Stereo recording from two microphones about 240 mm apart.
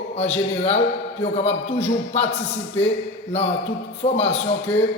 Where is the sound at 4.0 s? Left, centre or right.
Left.